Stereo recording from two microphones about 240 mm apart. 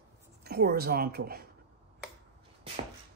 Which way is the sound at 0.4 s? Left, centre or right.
Right.